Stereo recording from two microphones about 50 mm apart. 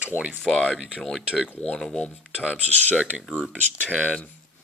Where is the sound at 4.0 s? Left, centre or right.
Left.